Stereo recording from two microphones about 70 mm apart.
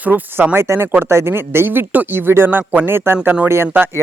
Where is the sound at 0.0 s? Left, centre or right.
Right.